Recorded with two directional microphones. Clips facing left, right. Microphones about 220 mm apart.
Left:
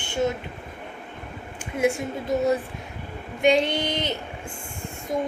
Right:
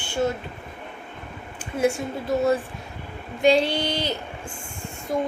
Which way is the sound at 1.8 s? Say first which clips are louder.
Even; 20° left (ahead or behind).